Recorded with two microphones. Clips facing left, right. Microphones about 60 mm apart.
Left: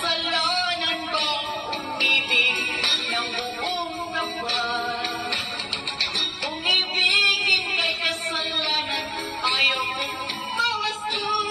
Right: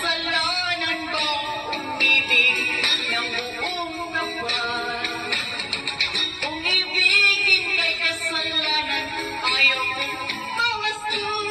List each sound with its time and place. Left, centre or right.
0.0 s a sound: right
1.1 s music: right
5.9 s music: right